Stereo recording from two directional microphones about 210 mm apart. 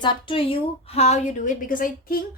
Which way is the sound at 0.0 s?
25° left (ahead or behind).